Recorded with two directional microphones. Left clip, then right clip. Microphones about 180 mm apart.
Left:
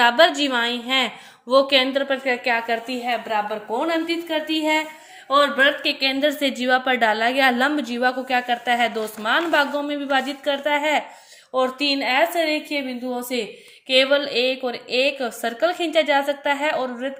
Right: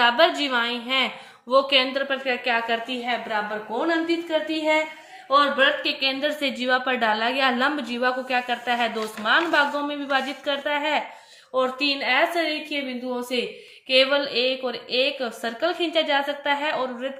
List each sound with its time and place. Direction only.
0.0 s a woman's voice: 40° left (ahead or behind)
3.8 s a woman's voice: 55° left (ahead or behind); by 17.1 s 35° left (ahead or behind)